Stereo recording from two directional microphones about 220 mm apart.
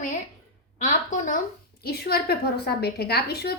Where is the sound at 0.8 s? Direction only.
35° left (ahead or behind).